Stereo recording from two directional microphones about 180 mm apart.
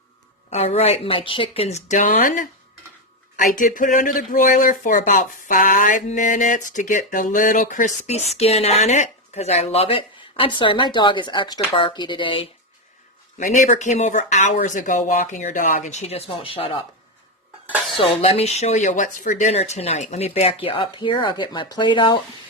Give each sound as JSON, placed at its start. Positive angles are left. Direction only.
{"t": 0.5, "sound": "speech", "side_deg": 35}
{"t": 13.4, "sound": "speech", "side_deg": 45}
{"t": 17.9, "sound": "speech", "side_deg": 30}